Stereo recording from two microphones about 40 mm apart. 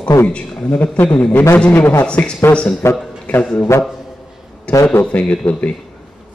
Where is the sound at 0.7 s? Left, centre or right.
Left.